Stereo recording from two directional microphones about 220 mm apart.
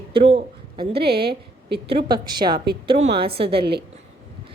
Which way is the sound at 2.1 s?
20° right (ahead or behind).